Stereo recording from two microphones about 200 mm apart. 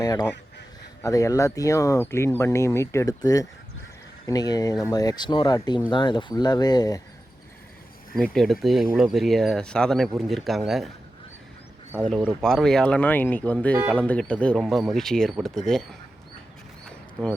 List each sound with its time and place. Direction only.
0.0 s duck: 20° left (ahead or behind)
1.0 s speech: 15° left (ahead or behind)
8.1 s speech: centre (ahead or behind)
12.0 s speech: centre (ahead or behind)